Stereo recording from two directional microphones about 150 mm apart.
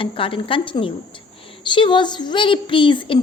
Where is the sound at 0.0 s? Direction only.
35° left (ahead or behind).